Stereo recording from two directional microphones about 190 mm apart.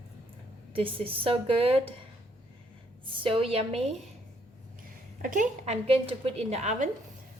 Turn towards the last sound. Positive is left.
turn(degrees=-35)  # may be behind; listen again after turning